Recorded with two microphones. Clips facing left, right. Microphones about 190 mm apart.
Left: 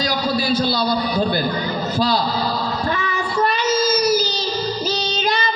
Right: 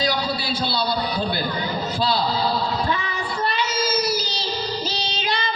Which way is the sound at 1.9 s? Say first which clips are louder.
Left 3 dB; 45° left (ahead or behind).